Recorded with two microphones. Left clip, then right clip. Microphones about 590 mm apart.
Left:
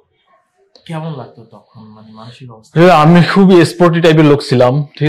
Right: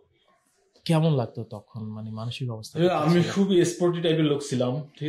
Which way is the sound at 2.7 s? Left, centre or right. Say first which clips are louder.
Left 16 dB; left.